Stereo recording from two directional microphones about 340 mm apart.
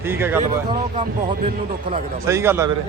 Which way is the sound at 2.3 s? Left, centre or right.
Centre.